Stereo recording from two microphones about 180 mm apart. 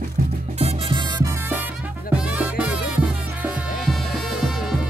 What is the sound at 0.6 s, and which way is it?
Music, 35° right (ahead or behind).